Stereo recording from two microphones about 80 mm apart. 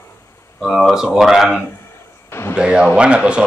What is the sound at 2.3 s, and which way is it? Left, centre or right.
Speech, left.